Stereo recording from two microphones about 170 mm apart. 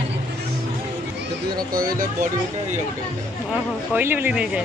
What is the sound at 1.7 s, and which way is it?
Speech, 55° right (ahead or behind).